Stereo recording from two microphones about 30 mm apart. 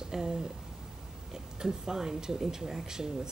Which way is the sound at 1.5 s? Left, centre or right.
Centre.